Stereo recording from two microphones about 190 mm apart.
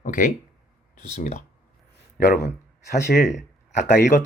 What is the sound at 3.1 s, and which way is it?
Speech, 65° left (ahead or behind).